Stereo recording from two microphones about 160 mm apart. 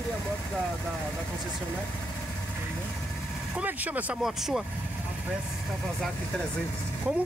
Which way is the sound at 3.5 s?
10° right (ahead or behind).